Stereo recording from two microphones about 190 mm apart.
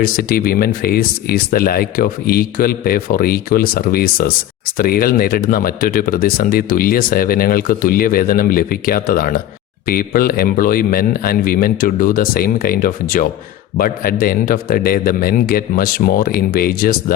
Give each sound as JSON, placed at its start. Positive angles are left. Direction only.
{"t": 0.0, "sound": "speech", "side_deg": 50}